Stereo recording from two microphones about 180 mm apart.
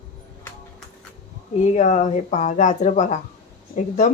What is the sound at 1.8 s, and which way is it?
Speech, 40° left (ahead or behind).